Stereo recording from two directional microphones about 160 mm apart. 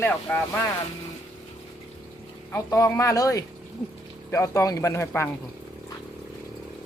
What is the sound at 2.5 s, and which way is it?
Speech, 20° left (ahead or behind).